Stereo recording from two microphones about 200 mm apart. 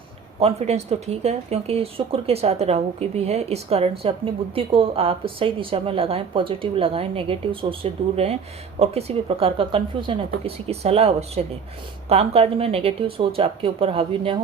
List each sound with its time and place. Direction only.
0.3 s a woman's voice: 30° right (ahead or behind)